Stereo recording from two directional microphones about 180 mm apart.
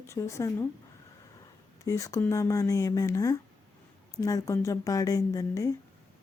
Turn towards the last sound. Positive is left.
turn(degrees=15)  # may be behind; listen again after turning